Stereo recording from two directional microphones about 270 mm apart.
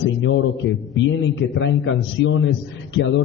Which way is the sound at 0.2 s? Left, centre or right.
Left.